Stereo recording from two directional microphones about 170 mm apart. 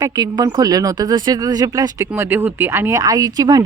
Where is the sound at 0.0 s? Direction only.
25° right (ahead or behind).